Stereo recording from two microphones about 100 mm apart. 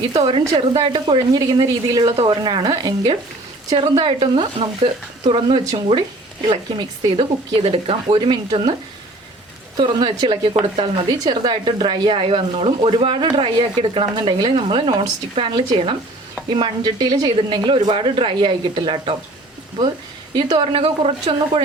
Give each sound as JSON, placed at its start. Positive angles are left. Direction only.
{"t": 0.2, "sound": "speech", "side_deg": -60}
{"t": 1.4, "sound": "speech", "side_deg": -40}
{"t": 3.8, "sound": "speech", "side_deg": -55}
{"t": 8.2, "sound": "speech", "side_deg": -55}
{"t": 9.7, "sound": "speech", "side_deg": -50}
{"t": 12.1, "sound": "speech", "side_deg": -60}
{"t": 17.3, "sound": "speech", "side_deg": -55}
{"t": 20.3, "sound": "speech", "side_deg": -55}